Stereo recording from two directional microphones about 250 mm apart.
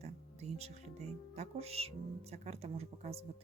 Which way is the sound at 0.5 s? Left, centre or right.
Right.